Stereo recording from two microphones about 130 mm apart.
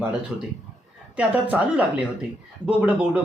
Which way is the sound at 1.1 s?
10° right (ahead or behind).